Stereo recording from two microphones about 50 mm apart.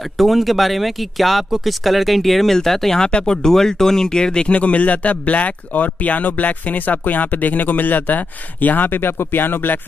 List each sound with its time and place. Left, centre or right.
0.2 s speech: centre; by 9.8 s left